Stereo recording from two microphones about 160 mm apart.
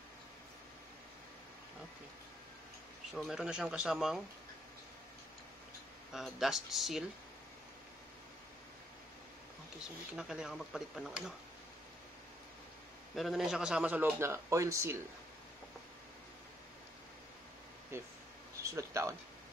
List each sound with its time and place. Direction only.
3.2 s speech: 5° right (ahead or behind)
6.1 s speech: centre (ahead or behind)
10.1 s speech: 5° right (ahead or behind)
13.1 s a man's voice: centre (ahead or behind); by 15.0 s 20° right (ahead or behind)
18.6 s speech: 20° right (ahead or behind)